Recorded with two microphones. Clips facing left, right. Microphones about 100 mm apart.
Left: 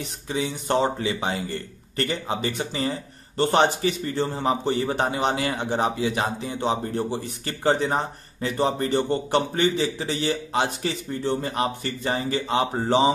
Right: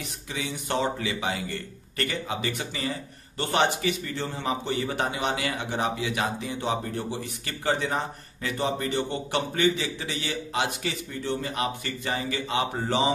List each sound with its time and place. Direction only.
0.0 s speech: 30° left (ahead or behind)